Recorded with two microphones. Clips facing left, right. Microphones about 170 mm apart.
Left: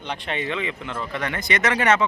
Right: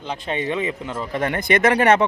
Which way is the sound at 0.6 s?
40° right (ahead or behind).